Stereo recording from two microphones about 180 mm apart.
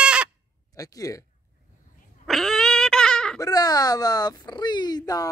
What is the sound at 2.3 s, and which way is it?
Dog, centre (ahead or behind).